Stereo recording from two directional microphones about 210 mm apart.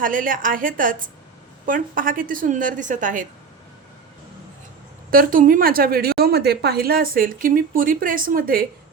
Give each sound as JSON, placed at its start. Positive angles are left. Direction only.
{"t": 0.0, "sound": "a woman's voice", "side_deg": -40}
{"t": 5.1, "sound": "a woman's voice", "side_deg": -40}